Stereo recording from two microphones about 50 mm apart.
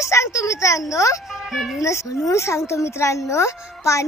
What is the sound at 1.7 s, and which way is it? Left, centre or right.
Speech, left.